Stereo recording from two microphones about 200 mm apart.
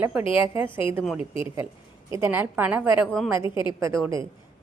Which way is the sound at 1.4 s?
15° right (ahead or behind).